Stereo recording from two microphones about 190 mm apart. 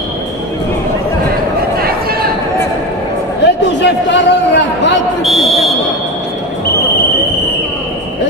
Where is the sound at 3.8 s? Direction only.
65° left (ahead or behind).